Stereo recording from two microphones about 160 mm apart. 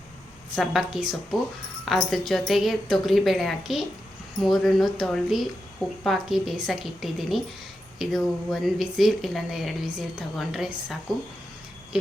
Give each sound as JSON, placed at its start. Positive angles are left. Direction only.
{"t": 0.5, "sound": "speech", "side_deg": 0}